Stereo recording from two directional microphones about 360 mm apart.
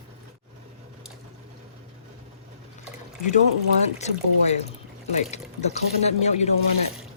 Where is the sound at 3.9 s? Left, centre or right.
Centre.